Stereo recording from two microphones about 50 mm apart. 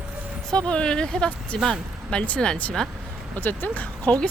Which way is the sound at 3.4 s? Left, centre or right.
Left.